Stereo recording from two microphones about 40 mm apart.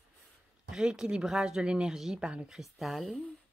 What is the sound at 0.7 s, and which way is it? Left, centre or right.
Speech, centre.